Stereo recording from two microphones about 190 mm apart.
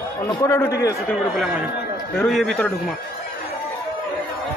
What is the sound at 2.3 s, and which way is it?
Speech, centre (ahead or behind).